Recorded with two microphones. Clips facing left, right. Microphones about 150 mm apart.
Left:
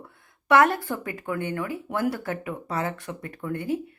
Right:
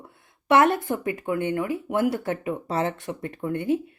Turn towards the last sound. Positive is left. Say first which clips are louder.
# right 4 dB
turn(degrees=-25)  # may be behind; listen again after turning